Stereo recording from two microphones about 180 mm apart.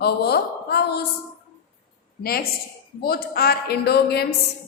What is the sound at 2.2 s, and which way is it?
A woman's voice, 60° left (ahead or behind).